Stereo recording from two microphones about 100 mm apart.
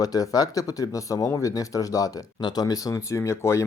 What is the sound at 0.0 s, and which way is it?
Speech, 40° left (ahead or behind).